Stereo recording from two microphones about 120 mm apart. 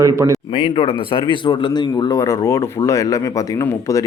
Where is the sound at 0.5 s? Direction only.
45° left (ahead or behind).